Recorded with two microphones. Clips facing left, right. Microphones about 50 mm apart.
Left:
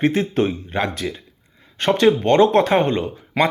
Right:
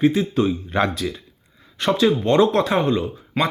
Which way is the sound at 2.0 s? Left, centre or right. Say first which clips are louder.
Left 2 dB; left.